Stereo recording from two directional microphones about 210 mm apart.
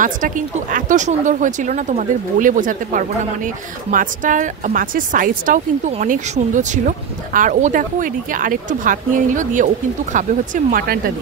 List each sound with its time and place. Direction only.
0.0 s speech: 40° right (ahead or behind)